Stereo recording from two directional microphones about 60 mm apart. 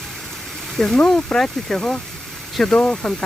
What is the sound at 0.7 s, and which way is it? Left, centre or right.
Speech, centre.